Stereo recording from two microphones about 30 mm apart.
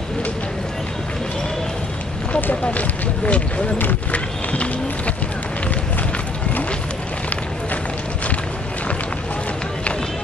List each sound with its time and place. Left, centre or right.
2.5 s speech: left
4.1 s run: left